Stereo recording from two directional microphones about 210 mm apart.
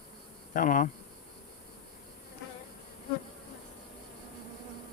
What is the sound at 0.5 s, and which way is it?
Speech, 40° left (ahead or behind).